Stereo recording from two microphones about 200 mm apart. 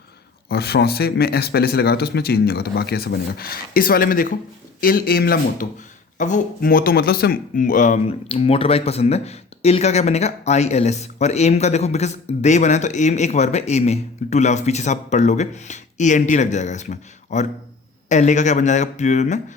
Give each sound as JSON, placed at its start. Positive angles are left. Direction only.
{"t": 0.4, "sound": "speech", "side_deg": 55}
{"t": 6.1, "sound": "speech", "side_deg": 40}